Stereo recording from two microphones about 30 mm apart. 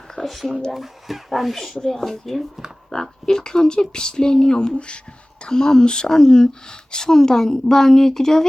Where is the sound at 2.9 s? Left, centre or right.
Left.